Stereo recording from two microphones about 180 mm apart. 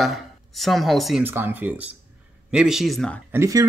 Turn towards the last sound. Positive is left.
turn(degrees=-15)  # may be behind; listen again after turning